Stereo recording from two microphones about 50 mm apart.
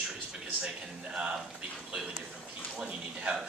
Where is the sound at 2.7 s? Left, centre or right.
Centre.